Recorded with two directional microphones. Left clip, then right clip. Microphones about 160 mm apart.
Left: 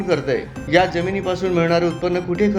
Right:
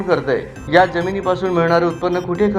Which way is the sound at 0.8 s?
10° left (ahead or behind).